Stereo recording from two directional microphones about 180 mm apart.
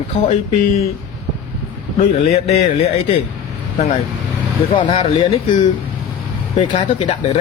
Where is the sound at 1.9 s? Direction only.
40° left (ahead or behind).